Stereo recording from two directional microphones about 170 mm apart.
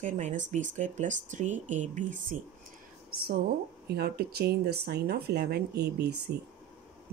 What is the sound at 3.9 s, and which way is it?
Speech, 70° right (ahead or behind).